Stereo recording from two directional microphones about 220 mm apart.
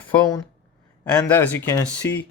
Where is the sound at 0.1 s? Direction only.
15° left (ahead or behind).